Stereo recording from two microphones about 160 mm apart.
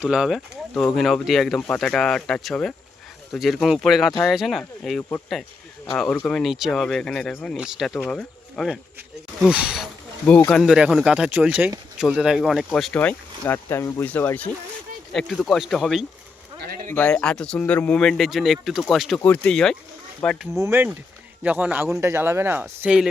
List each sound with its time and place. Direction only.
0.0 s speech: 5° right (ahead or behind)
10.2 s speech: 10° left (ahead or behind)
16.6 s a sound: 70° right (ahead or behind)
16.9 s speech: 10° left (ahead or behind)
20.6 s speech: 15° right (ahead or behind)